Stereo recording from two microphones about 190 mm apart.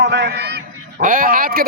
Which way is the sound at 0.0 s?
65° right (ahead or behind).